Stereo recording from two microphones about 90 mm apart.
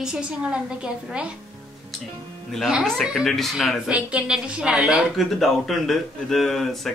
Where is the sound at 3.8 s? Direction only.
10° right (ahead or behind).